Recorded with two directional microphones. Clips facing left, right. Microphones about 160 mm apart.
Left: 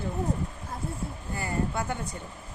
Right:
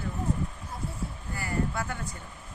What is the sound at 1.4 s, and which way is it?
Speech, 25° left (ahead or behind).